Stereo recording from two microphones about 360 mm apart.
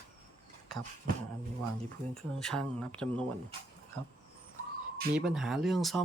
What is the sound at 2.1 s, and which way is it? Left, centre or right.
Speech, centre.